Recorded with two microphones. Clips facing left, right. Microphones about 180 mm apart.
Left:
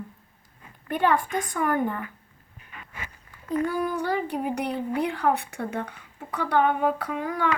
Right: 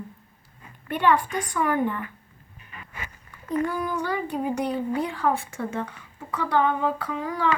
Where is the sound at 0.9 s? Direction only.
45° left (ahead or behind).